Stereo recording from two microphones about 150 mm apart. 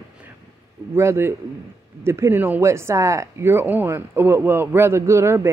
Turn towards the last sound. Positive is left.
turn(degrees=-20)  # may be behind; listen again after turning